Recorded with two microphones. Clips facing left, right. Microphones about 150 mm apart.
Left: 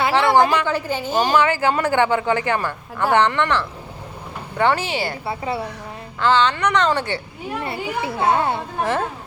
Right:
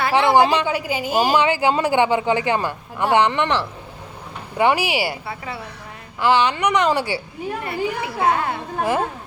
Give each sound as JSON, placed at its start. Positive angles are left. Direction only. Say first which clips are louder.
{"t": 0.1, "sound": "a woman's voice", "louder": "right 2 dB", "side_deg": -15}
{"t": 5.2, "sound": "a child's voice", "louder": "left 6 dB", "side_deg": 30}
{"t": 6.1, "sound": "a woman's voice", "louder": "even", "side_deg": -15}
{"t": 7.6, "sound": "a child's voice", "louder": "even", "side_deg": 30}
{"t": 8.8, "sound": "a woman's voice", "louder": "right 2 dB", "side_deg": -10}